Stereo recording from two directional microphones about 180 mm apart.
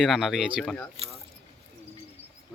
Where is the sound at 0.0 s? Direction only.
Centre (ahead or behind).